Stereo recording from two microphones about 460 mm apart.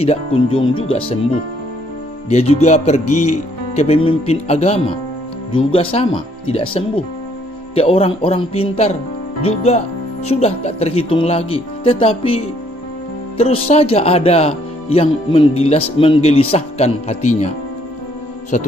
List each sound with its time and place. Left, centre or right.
0.0 s speech: centre
2.2 s speech: centre
3.1 s speech: left
3.3 s speech: centre
18.5 s speech: centre